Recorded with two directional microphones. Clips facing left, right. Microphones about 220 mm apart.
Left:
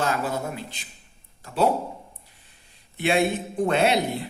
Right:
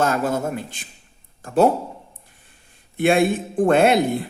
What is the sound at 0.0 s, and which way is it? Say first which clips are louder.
Speech: right 5 dB; 45° right (ahead or behind).